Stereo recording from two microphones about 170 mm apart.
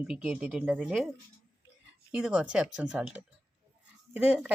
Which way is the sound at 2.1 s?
5° right (ahead or behind).